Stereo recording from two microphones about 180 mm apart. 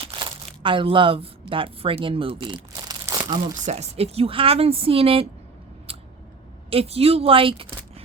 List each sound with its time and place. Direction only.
0.0 s speech: 30° right (ahead or behind)
3.7 s speech: 35° right (ahead or behind)
6.7 s a woman's voice: 35° right (ahead or behind)